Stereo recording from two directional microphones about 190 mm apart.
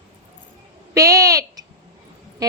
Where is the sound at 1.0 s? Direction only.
15° right (ahead or behind).